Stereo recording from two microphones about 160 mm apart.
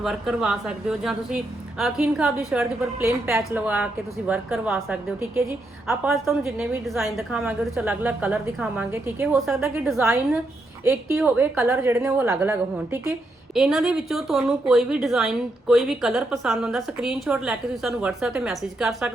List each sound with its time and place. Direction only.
0.0 s a woman's voice: 5° right (ahead or behind)
5.2 s a woman's voice: 20° right (ahead or behind)
5.9 s a woman's voice: 5° right (ahead or behind)
11.2 s a woman's voice: 10° right (ahead or behind)
13.5 s a woman's voice: centre (ahead or behind)